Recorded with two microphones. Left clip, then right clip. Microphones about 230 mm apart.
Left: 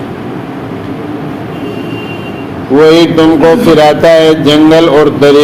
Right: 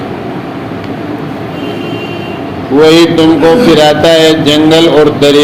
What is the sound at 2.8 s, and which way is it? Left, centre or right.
A man's voice, left.